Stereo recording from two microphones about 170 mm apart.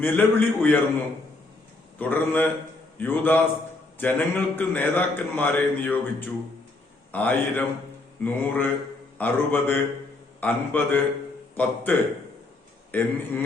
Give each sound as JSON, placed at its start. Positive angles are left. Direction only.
{"t": 0.0, "sound": "a man's voice", "side_deg": 10}
{"t": 2.0, "sound": "a man's voice", "side_deg": 10}